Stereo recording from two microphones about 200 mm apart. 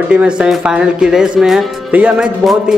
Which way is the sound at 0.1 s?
5° right (ahead or behind).